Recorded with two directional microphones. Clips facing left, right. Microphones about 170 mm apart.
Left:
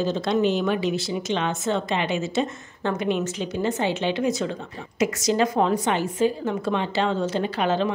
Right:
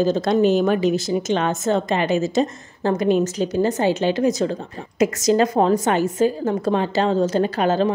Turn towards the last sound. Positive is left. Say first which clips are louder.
# right 4 dB
turn(degrees=-40)  # may be behind; listen again after turning